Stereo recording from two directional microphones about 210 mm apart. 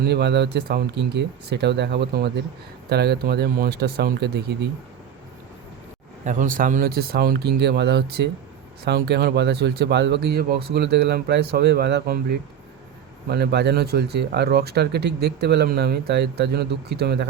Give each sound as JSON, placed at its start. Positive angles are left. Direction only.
{"t": 0.0, "sound": "speech", "side_deg": -55}
{"t": 6.2, "sound": "speech", "side_deg": -40}